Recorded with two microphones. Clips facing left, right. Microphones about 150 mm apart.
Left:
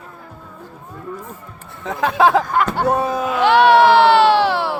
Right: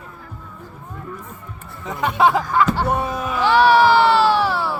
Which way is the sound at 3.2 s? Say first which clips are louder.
Left 2 dB; 65° left (ahead or behind).